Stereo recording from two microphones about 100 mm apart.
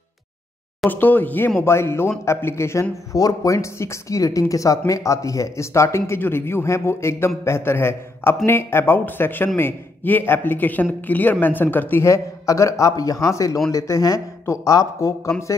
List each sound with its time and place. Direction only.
0.8 s speech: 15° left (ahead or behind)